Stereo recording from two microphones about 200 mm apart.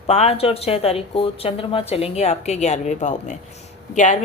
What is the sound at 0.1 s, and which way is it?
A woman's voice, 30° left (ahead or behind).